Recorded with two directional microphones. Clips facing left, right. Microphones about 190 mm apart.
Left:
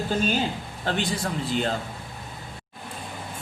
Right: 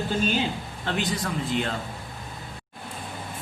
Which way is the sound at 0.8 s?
30° left (ahead or behind).